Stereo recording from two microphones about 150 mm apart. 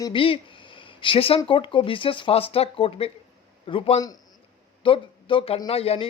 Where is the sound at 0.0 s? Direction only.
35° left (ahead or behind).